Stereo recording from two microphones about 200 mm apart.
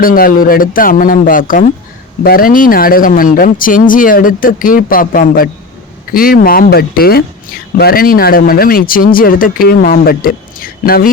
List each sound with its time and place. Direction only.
0.0 s speech: 45° left (ahead or behind)